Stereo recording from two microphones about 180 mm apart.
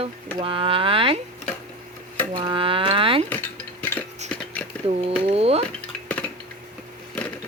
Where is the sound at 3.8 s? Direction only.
10° left (ahead or behind).